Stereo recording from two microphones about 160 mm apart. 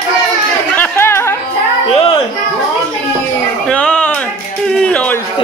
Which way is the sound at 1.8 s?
35° left (ahead or behind).